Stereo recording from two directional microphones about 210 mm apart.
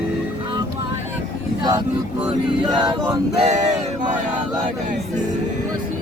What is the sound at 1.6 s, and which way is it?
Vehicle, 20° right (ahead or behind).